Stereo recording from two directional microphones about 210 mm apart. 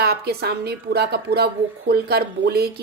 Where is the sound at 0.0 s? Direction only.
50° right (ahead or behind).